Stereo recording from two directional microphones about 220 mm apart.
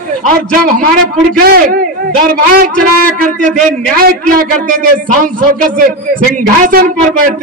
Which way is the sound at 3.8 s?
40° right (ahead or behind).